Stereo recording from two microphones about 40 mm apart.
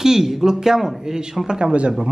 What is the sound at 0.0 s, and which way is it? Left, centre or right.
Speech, centre.